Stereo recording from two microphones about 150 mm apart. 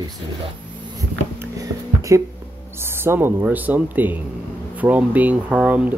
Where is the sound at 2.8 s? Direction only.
15° right (ahead or behind).